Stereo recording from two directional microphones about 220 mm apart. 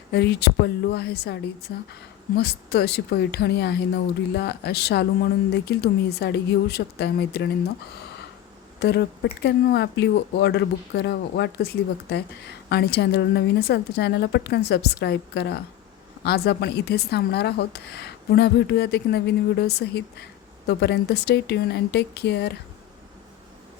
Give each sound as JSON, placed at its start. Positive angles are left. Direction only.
{"t": 0.1, "sound": "speech", "side_deg": 50}
{"t": 8.8, "sound": "speech", "side_deg": 50}